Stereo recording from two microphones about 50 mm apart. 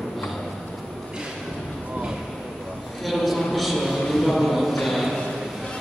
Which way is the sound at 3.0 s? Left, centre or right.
Centre.